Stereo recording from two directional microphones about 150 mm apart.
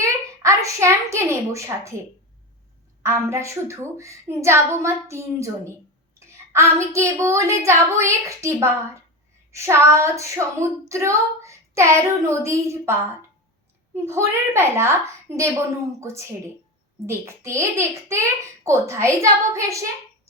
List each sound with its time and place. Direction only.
0.0 s a woman's voice: 20° right (ahead or behind)
3.0 s a child's voice: 20° right (ahead or behind)